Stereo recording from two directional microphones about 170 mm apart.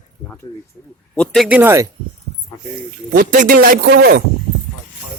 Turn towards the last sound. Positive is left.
turn(degrees=-75)  # may be behind; listen again after turning